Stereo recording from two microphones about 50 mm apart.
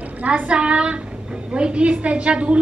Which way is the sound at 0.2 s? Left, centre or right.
Right.